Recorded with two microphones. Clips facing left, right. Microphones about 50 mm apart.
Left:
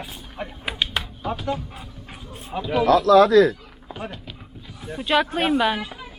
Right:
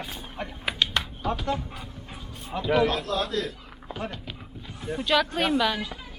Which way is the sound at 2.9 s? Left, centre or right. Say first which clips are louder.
Left 14 dB; left.